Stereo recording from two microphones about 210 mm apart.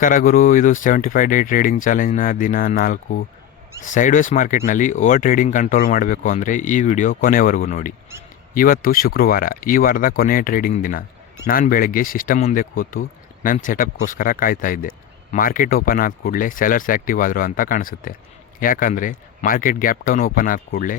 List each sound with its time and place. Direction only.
0.0 s speech: 40° left (ahead or behind)